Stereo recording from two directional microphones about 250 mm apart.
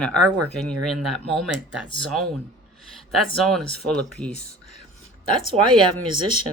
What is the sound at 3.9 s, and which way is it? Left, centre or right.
Speech, right.